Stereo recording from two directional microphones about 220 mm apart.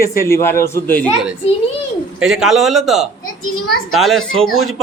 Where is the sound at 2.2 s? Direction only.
Centre (ahead or behind).